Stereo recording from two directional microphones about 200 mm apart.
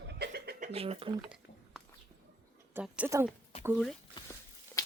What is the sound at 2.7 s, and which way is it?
Speech, 10° right (ahead or behind).